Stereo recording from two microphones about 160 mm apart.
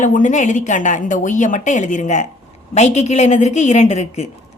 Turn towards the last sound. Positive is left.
turn(degrees=45)  # may be behind; listen again after turning